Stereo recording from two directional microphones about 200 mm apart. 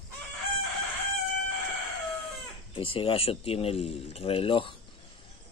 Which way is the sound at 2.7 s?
25° left (ahead or behind).